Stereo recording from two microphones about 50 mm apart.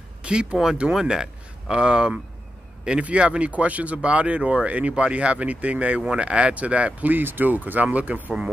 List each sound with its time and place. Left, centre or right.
0.2 s speech: centre